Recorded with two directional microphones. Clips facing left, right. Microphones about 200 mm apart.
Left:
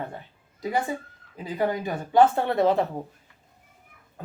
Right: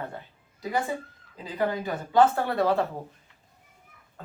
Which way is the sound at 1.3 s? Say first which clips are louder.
Left 2 dB; 20° left (ahead or behind).